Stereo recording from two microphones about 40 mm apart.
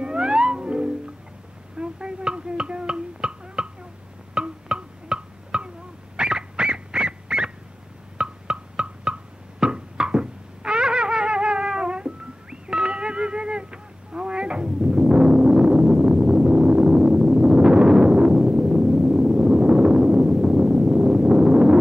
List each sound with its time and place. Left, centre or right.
0.0 s music: right
1.8 s a sound: right
4.3 s music: right
6.1 s dog: right
8.2 s music: right